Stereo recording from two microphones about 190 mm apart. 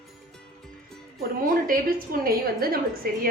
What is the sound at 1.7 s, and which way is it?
A woman's voice, 50° right (ahead or behind).